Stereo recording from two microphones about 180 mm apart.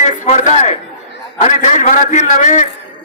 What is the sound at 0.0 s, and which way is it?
A man's voice, 40° left (ahead or behind).